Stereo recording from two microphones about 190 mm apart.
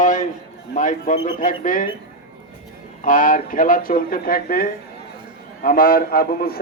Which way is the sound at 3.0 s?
45° left (ahead or behind).